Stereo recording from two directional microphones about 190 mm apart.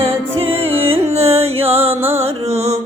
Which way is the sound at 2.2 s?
35° right (ahead or behind).